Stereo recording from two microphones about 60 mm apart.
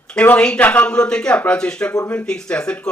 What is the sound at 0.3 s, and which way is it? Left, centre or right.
Speech, centre.